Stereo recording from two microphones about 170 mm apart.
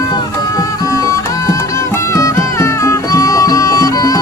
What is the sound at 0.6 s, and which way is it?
Music, 20° left (ahead or behind).